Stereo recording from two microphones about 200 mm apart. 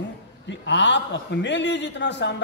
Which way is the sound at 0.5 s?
65° left (ahead or behind).